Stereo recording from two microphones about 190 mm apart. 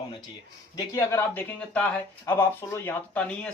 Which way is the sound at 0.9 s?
10° left (ahead or behind).